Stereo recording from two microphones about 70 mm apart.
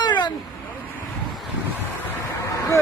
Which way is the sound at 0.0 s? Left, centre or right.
Left.